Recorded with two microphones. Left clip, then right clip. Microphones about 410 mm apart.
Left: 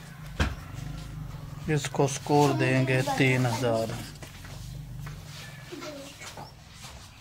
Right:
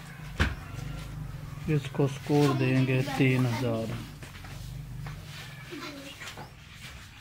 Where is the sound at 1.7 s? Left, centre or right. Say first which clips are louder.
Left 3 dB; left.